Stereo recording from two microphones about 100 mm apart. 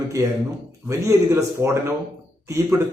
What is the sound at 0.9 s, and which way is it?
A man's voice, 30° right (ahead or behind).